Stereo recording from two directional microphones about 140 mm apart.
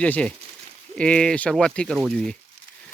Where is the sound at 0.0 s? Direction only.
10° left (ahead or behind).